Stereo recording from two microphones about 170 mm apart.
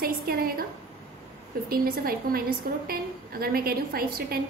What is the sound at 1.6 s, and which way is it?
A woman's voice, 60° right (ahead or behind).